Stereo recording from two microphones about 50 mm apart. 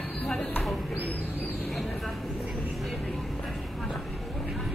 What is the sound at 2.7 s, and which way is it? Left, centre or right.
Vehicle, centre.